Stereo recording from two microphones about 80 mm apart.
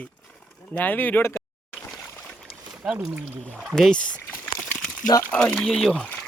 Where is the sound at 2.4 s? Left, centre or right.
Centre.